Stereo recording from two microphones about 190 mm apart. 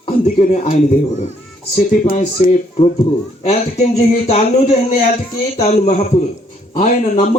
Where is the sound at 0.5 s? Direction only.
45° left (ahead or behind).